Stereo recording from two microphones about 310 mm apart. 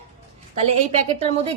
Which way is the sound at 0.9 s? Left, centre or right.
Right.